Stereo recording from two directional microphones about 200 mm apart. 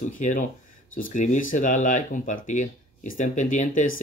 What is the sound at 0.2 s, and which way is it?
Speech, 40° left (ahead or behind).